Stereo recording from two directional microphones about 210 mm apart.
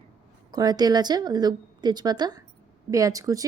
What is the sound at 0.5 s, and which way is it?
A woman's voice, 20° right (ahead or behind).